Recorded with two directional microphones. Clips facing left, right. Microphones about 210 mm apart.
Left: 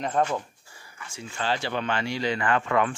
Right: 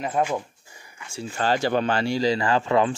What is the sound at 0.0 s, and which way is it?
Speech, 10° right (ahead or behind).